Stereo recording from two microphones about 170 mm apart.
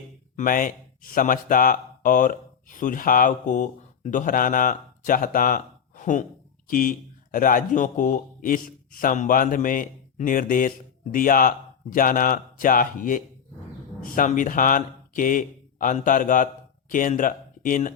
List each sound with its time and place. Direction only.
0.3 s speech: 55° left (ahead or behind)